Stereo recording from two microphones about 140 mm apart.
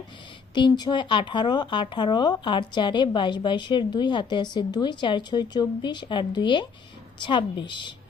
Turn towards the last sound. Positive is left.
turn(degrees=35)  # may be behind; listen again after turning